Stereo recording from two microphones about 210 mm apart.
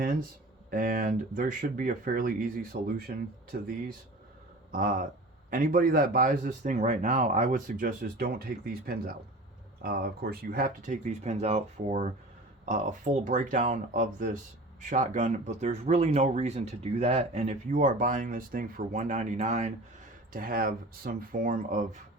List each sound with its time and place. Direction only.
0.7 s speech: 40° right (ahead or behind)
4.7 s speech: 40° right (ahead or behind)
20.3 s speech: 40° right (ahead or behind)